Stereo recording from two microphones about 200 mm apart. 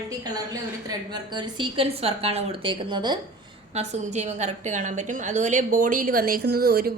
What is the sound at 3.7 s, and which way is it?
A woman's voice, 35° right (ahead or behind).